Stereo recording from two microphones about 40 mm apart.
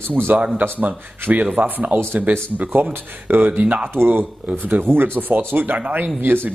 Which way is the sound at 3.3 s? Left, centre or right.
Right.